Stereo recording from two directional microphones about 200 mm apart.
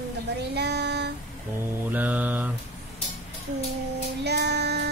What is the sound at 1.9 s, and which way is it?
Speech, 10° right (ahead or behind).